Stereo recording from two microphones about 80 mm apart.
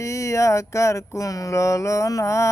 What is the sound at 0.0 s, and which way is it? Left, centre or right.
Mantra, left.